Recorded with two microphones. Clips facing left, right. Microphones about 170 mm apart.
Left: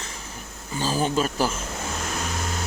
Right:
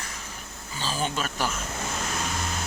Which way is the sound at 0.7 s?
45° left (ahead or behind).